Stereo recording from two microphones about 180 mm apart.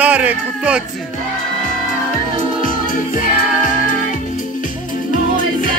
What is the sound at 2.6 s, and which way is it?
Music, 50° left (ahead or behind).